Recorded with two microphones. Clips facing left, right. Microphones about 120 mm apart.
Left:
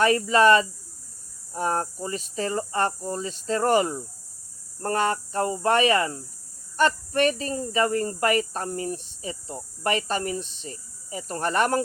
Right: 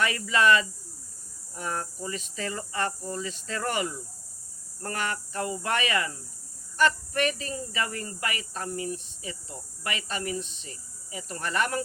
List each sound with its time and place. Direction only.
0.0 s speech: 40° left (ahead or behind)